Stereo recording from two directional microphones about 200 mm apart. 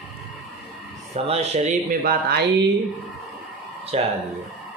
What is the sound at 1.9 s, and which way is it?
Speech, 50° right (ahead or behind).